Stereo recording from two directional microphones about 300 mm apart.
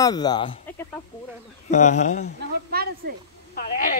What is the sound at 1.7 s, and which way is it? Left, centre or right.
Speech, left.